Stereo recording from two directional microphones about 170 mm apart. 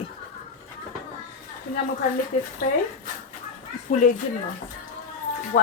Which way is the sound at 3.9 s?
50° left (ahead or behind).